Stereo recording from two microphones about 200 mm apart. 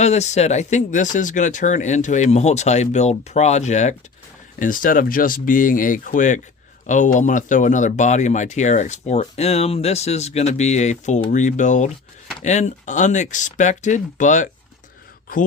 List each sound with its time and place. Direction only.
0.0 s speech: 35° left (ahead or behind)